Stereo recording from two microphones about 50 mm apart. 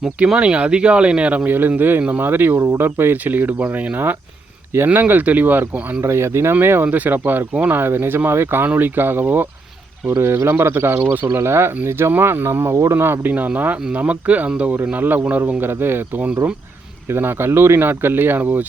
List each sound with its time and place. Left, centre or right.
0.3 s speech: right
1.5 s speech: right
6.0 s speech: right
6.8 s speech: right
10.1 s speech: right
11.9 s speech: right
13.3 s speech: right
15.6 s speech: right